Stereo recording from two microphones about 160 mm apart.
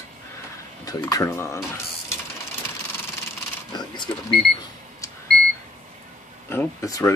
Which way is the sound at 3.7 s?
25° left (ahead or behind).